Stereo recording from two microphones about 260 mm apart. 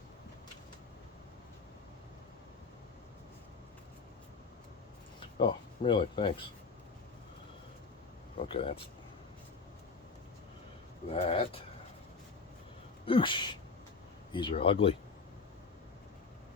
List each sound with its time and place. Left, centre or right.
5.5 s speech: centre
8.4 s speech: left
11.1 s speech: left
13.1 s speech: centre